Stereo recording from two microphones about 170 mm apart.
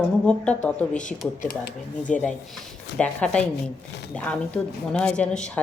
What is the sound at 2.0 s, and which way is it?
A woman's voice, 10° left (ahead or behind).